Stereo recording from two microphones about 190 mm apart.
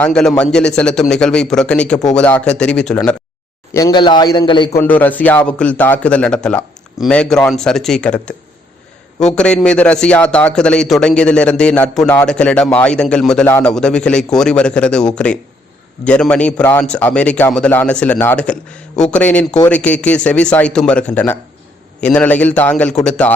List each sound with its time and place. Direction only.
0.0 s a man's voice: 5° left (ahead or behind)
3.8 s a man's voice: 20° left (ahead or behind)
4.8 s a man's voice: 10° left (ahead or behind)
9.3 s a man's voice: 5° left (ahead or behind)